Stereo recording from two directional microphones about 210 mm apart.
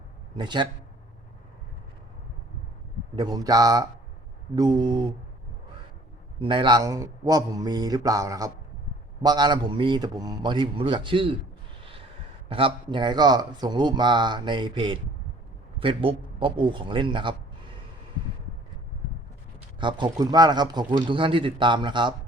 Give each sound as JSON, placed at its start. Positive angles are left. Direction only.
{"t": 0.3, "sound": "speech", "side_deg": -20}
{"t": 3.2, "sound": "a man's voice", "side_deg": -20}
{"t": 6.4, "sound": "a man's voice", "side_deg": -25}
{"t": 11.8, "sound": "snort", "side_deg": -25}
{"t": 12.5, "sound": "speech", "side_deg": -25}
{"t": 19.8, "sound": "speech", "side_deg": -20}